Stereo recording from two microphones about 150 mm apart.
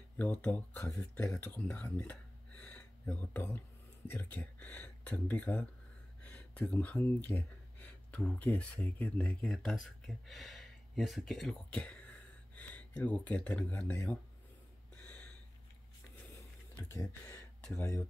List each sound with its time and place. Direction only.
0.2 s speech: 10° left (ahead or behind)
15.0 s a sound: 10° left (ahead or behind)
16.7 s speech: 15° left (ahead or behind)